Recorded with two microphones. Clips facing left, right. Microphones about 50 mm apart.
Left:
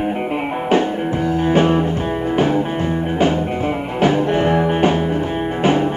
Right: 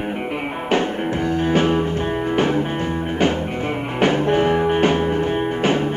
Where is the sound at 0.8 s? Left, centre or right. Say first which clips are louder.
Left 2 dB; centre.